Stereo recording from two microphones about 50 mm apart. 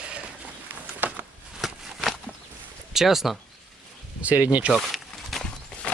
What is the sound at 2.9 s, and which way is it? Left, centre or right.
Speech, centre.